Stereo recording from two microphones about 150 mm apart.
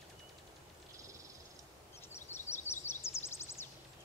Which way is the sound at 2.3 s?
15° left (ahead or behind).